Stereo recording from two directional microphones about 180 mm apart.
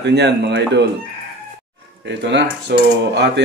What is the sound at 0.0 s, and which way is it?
Speech, 65° right (ahead or behind).